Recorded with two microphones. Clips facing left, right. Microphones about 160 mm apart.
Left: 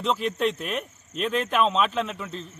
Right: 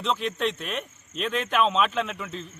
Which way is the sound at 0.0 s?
5° left (ahead or behind).